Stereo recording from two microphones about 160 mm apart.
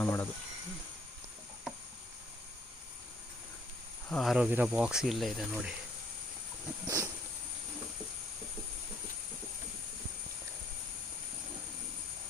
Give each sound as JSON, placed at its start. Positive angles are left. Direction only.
{"t": 0.0, "sound": "speech", "side_deg": 10}
{"t": 4.1, "sound": "speech", "side_deg": 0}
{"t": 6.8, "sound": "vehicle", "side_deg": -15}